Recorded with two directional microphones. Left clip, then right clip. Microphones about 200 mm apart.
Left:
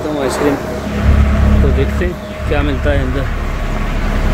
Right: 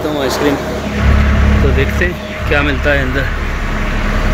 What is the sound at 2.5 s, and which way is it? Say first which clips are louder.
Speech: right 4 dB; 15° left (ahead or behind).